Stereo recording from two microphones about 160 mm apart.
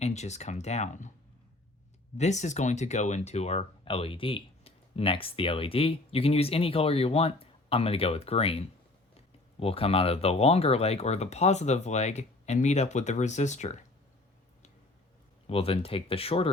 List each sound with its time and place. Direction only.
0.0 s speech: 45° left (ahead or behind)
2.1 s speech: 45° left (ahead or behind)
15.4 s speech: 35° left (ahead or behind)